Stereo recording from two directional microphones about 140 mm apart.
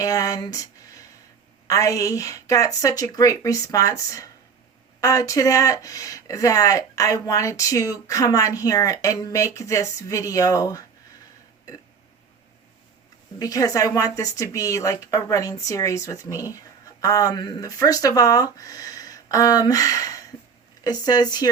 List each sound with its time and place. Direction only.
0.0 s speech: 25° left (ahead or behind)
13.4 s speech: 25° left (ahead or behind)